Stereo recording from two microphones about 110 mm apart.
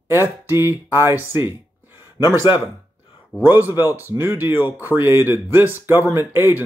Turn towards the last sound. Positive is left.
turn(degrees=-20)  # may be behind; listen again after turning